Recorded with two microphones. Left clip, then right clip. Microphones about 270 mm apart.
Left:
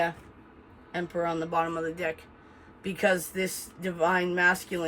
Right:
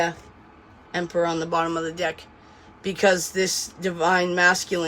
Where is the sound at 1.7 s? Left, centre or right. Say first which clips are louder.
Right 5 dB; centre.